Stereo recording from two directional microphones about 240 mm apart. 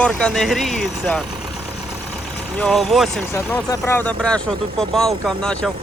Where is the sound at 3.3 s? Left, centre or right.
Centre.